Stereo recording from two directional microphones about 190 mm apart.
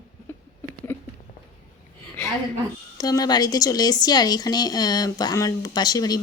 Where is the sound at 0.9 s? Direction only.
10° left (ahead or behind).